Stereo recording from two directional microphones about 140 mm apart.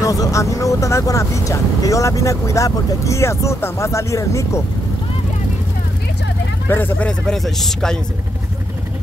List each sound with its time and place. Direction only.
0.0 s speech: 25° left (ahead or behind)
6.7 s speech: 15° left (ahead or behind)